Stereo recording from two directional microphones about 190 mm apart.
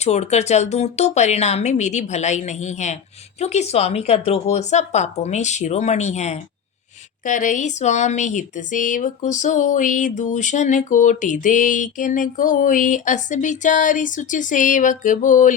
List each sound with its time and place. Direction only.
0.0 s speech: 35° left (ahead or behind)